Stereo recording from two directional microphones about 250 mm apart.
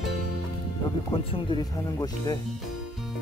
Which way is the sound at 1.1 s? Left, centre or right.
Left.